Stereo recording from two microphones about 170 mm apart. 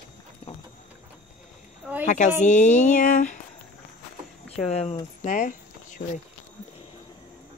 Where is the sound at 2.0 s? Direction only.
45° left (ahead or behind).